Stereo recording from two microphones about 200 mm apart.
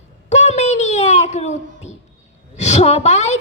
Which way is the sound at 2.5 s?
35° left (ahead or behind).